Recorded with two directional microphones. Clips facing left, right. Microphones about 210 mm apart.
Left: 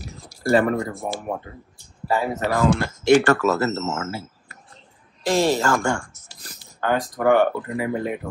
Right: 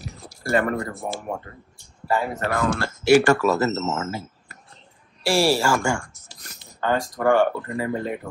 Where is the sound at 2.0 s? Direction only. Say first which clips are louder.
Left 2 dB; 20° left (ahead or behind).